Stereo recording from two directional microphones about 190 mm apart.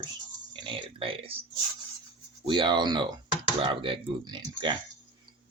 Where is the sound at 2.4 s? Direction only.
25° right (ahead or behind).